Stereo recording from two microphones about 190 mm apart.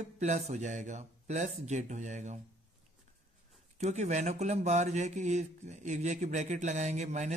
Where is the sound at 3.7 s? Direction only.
35° right (ahead or behind).